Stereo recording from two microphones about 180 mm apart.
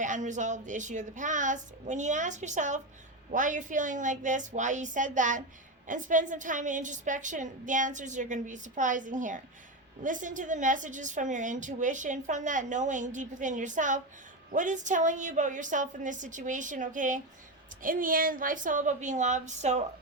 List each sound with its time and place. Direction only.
0.0 s a woman's voice: 45° right (ahead or behind)